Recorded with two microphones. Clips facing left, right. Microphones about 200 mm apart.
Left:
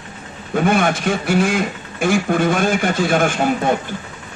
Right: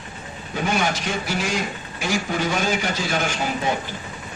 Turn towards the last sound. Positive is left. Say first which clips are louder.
# left 7 dB
turn(degrees=55)  # may be behind; listen again after turning